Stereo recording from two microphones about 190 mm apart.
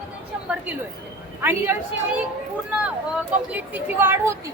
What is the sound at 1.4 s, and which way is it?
Speech, 10° right (ahead or behind).